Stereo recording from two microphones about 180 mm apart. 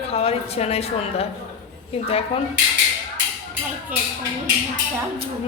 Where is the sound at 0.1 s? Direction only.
35° left (ahead or behind).